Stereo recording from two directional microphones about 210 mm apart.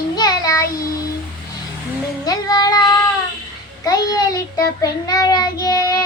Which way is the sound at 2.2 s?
20° left (ahead or behind).